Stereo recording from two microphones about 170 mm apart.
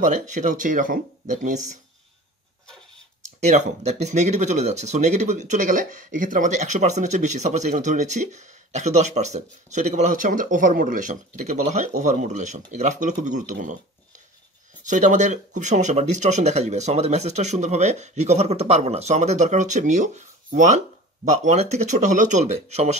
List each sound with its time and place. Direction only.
0.0 s speech: 45° right (ahead or behind)
3.4 s speech: 40° right (ahead or behind)
14.9 s speech: 50° right (ahead or behind)